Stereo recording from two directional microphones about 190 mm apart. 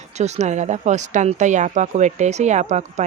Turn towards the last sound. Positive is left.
turn(degrees=-35)  # may be behind; listen again after turning